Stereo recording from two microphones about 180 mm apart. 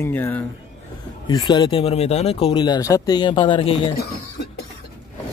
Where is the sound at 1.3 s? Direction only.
25° left (ahead or behind).